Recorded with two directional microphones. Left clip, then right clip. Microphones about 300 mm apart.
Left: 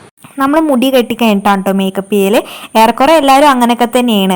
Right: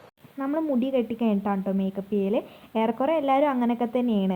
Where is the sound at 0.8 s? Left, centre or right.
Centre.